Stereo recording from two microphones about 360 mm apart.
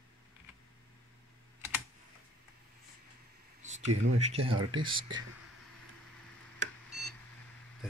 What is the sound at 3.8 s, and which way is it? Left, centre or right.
Speech, right.